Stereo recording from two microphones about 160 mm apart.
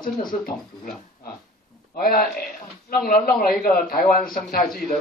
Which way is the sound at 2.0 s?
65° left (ahead or behind).